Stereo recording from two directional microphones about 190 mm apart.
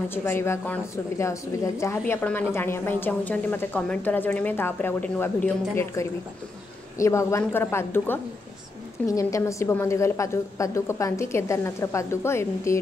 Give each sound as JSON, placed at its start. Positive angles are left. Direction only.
{"t": 0.1, "sound": "a woman's voice", "side_deg": 10}